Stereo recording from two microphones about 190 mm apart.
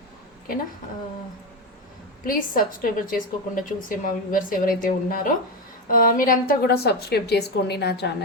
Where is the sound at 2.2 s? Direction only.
45° left (ahead or behind).